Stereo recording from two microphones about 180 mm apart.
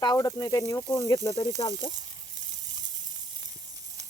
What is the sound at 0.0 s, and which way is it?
Speech, 20° left (ahead or behind).